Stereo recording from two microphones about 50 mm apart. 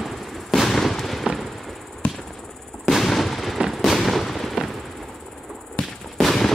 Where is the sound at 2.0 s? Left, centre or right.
Left.